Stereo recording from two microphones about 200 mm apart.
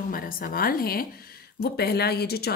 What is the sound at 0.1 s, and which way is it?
A woman's voice, 45° left (ahead or behind).